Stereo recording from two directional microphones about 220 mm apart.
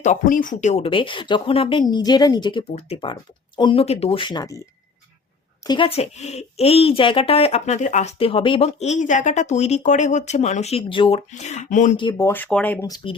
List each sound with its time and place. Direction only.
0.0 s speech: 35° left (ahead or behind); by 4.5 s 20° left (ahead or behind)
5.6 s speech: 20° left (ahead or behind)
11.9 s speech: 20° left (ahead or behind)